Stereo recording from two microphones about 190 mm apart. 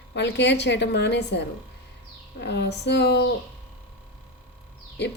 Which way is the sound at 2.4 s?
65° left (ahead or behind).